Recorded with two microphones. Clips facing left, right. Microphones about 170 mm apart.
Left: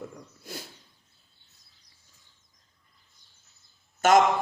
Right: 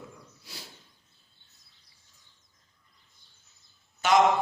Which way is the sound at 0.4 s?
50° left (ahead or behind).